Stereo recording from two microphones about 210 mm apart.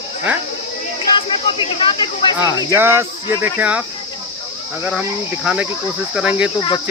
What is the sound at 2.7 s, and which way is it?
Cricket, 10° right (ahead or behind).